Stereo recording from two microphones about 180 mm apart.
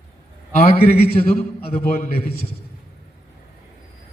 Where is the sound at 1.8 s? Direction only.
55° left (ahead or behind).